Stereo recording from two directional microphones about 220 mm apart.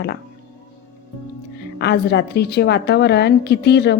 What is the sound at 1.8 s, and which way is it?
Speech, 50° left (ahead or behind).